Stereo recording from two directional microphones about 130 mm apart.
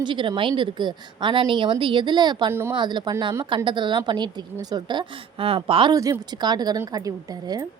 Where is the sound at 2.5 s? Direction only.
20° right (ahead or behind).